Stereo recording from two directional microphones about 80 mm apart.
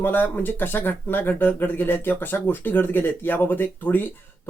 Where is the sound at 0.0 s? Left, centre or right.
Left.